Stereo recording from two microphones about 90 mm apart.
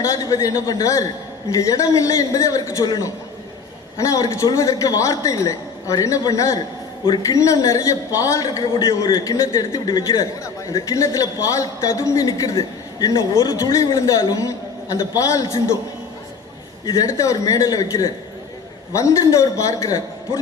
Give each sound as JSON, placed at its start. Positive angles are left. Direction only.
{"t": 0.0, "sound": "a man's voice", "side_deg": 40}
{"t": 2.8, "sound": "a man's voice", "side_deg": 45}
{"t": 4.0, "sound": "a man's voice", "side_deg": 35}
{"t": 10.4, "sound": "a man's voice", "side_deg": 40}
{"t": 13.4, "sound": "a man's voice", "side_deg": 50}
{"t": 16.8, "sound": "a man's voice", "side_deg": 40}